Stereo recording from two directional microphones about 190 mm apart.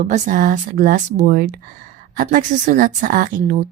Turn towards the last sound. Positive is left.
turn(degrees=-45)  # may be behind; listen again after turning